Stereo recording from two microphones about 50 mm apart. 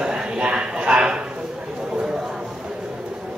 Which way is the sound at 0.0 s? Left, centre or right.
Centre.